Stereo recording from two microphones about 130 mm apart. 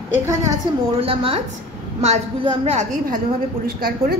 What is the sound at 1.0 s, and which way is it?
Speech, 45° right (ahead or behind).